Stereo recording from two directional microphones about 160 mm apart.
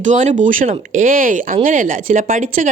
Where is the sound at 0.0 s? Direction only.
50° right (ahead or behind).